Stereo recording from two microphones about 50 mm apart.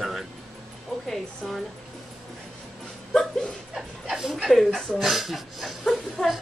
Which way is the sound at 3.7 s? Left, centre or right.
Centre.